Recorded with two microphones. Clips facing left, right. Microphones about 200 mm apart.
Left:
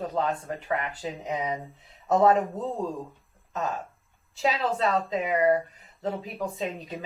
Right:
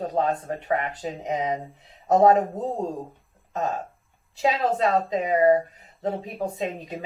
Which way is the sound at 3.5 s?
40° right (ahead or behind).